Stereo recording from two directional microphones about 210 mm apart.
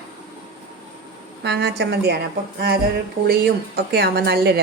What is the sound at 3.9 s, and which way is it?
Speech, 50° right (ahead or behind).